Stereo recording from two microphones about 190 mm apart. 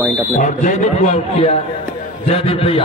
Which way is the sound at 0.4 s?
40° left (ahead or behind).